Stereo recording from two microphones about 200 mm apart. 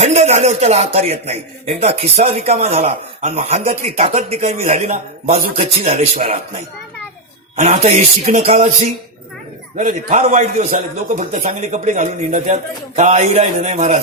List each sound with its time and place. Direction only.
0.0 s speech: 35° right (ahead or behind)
7.5 s speech: 30° right (ahead or behind)
9.7 s speech: 35° right (ahead or behind)